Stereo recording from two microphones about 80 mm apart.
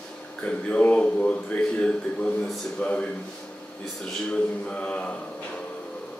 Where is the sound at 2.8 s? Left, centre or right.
Centre.